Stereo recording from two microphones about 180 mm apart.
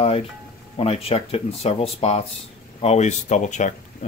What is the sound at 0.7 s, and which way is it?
Speech, 35° left (ahead or behind).